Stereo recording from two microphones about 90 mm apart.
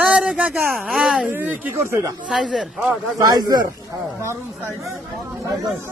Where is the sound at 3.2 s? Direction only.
45° right (ahead or behind).